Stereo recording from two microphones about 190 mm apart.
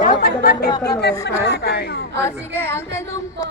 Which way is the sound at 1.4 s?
60° left (ahead or behind).